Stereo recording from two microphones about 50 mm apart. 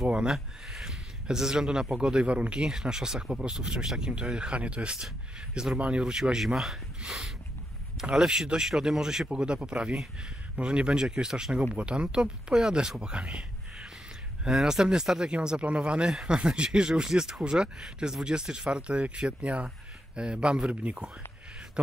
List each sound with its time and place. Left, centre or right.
0.0 s a man's voice: centre
14.4 s a man's voice: centre